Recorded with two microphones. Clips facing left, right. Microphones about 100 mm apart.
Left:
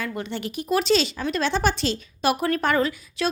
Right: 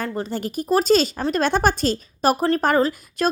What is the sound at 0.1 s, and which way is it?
Speech, 40° right (ahead or behind).